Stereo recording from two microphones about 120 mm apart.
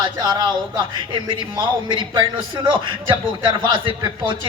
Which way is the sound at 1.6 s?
40° right (ahead or behind).